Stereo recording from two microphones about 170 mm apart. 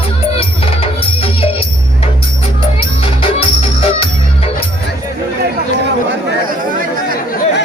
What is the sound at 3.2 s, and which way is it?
Music, 35° left (ahead or behind).